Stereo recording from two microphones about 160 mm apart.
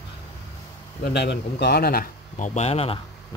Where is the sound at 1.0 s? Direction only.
90° left.